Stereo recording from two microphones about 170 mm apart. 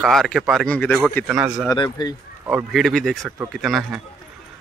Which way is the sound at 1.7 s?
25° left (ahead or behind).